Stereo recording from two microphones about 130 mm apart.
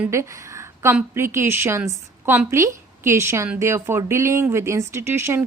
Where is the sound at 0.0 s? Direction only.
20° right (ahead or behind).